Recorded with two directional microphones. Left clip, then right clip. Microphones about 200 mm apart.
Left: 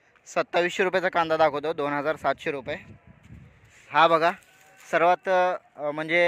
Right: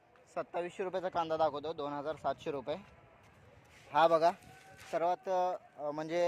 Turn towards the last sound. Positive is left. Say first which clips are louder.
# left 10 dB
turn(degrees=20)  # may be behind; listen again after turning